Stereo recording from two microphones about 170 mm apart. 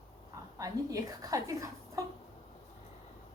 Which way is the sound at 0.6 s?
20° right (ahead or behind).